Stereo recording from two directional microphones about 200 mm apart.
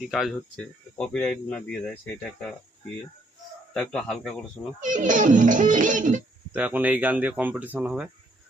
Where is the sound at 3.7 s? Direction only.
5° left (ahead or behind).